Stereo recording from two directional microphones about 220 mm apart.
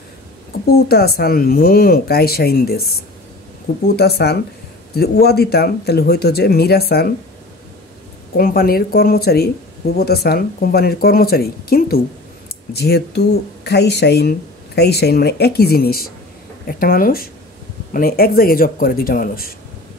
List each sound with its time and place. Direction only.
0.8 s speech: 45° left (ahead or behind)
8.4 s speech: 40° left (ahead or behind)